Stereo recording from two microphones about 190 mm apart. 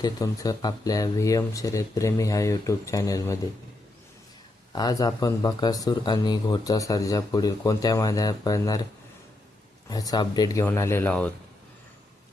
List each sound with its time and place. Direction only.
0.0 s speech: 20° left (ahead or behind)
4.7 s speech: 20° left (ahead or behind)
9.9 s speech: 20° left (ahead or behind)